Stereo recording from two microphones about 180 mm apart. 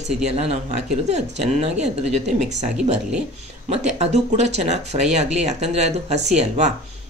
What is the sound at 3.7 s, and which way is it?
Speech, 35° right (ahead or behind).